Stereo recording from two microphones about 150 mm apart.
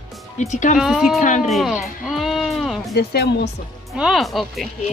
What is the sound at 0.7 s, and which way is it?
Speech, centre (ahead or behind).